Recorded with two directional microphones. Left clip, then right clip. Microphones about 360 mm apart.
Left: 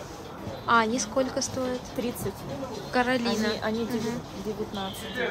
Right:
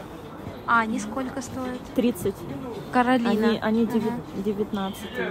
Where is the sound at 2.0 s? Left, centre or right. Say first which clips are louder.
Right 10 dB; centre.